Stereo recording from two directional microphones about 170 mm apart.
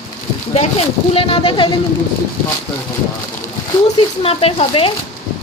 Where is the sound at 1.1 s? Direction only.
30° left (ahead or behind).